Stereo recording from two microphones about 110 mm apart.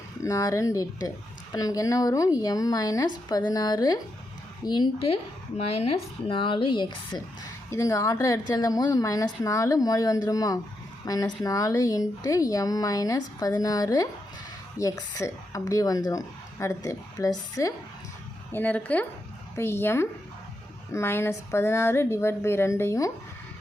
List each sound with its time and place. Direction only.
0.2 s speech: 30° left (ahead or behind)
4.9 s a woman's voice: 60° left (ahead or behind)
7.7 s speech: 30° left (ahead or behind)
18.5 s a woman's voice: 15° left (ahead or behind)